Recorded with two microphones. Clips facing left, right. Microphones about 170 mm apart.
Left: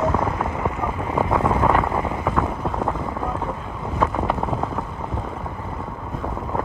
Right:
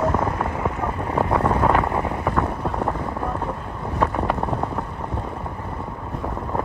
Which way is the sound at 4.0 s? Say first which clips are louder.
Even; centre (ahead or behind).